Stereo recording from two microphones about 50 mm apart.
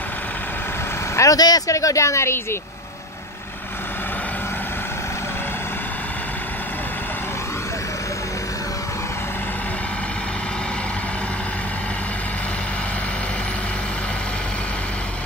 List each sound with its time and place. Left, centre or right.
1.1 s speech: left